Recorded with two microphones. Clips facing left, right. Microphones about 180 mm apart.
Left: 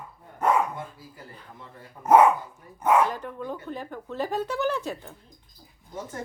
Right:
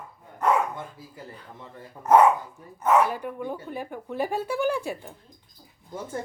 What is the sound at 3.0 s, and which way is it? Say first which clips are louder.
Speech: right 2 dB; 10° right (ahead or behind).